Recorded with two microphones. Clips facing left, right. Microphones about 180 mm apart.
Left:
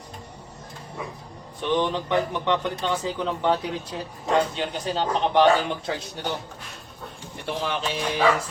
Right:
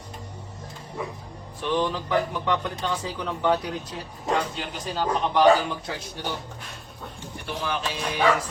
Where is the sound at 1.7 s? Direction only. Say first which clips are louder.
Left 1 dB; 25° left (ahead or behind).